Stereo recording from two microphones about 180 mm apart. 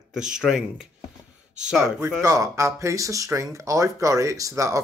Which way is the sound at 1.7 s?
15° right (ahead or behind).